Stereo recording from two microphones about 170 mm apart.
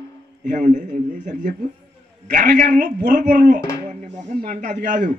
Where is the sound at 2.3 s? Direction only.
50° right (ahead or behind).